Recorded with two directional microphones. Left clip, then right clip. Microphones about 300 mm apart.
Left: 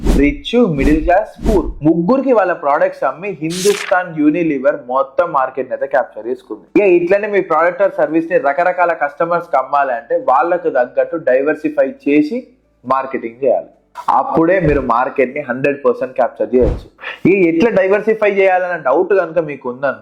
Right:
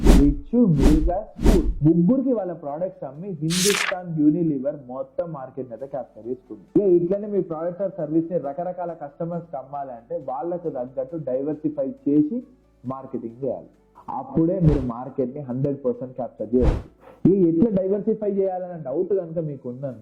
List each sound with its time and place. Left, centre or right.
0.0 s a sound: centre
0.4 s a man's voice: centre
0.8 s speech: centre
1.0 s a man's voice: centre
1.4 s a man's voice: centre
3.4 s a man's voice: centre
13.2 s speech: left
14.1 s a man's voice: centre